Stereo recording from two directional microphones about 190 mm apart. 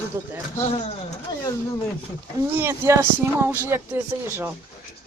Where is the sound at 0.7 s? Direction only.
30° left (ahead or behind).